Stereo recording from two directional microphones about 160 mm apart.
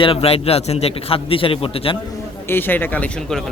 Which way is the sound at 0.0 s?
35° left (ahead or behind).